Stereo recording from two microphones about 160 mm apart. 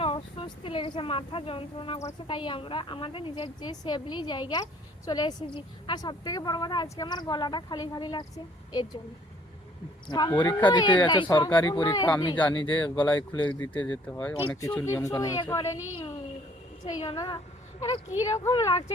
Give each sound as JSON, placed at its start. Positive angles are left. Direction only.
{"t": 0.0, "sound": "a woman's voice", "side_deg": 35}
{"t": 10.1, "sound": "a woman's voice", "side_deg": 25}
{"t": 13.0, "sound": "speech", "side_deg": 10}
{"t": 14.8, "sound": "a woman's voice", "side_deg": 15}
{"t": 16.8, "sound": "a woman's voice", "side_deg": 30}